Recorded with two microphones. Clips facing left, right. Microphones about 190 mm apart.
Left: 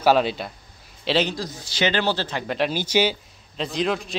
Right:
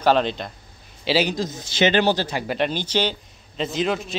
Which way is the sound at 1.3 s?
20° right (ahead or behind).